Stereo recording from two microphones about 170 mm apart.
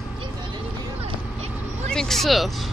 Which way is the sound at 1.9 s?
Centre (ahead or behind).